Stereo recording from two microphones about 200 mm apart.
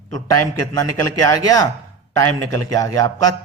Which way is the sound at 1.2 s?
15° left (ahead or behind).